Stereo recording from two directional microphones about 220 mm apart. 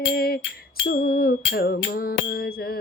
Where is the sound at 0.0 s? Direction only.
45° left (ahead or behind).